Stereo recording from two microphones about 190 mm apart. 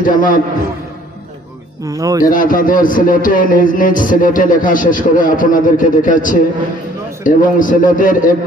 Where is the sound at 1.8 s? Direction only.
20° right (ahead or behind).